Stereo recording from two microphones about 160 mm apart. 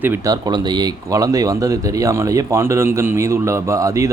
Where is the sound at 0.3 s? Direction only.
25° right (ahead or behind).